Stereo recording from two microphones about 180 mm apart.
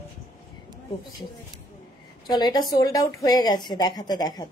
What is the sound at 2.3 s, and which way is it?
A woman's voice, 25° left (ahead or behind).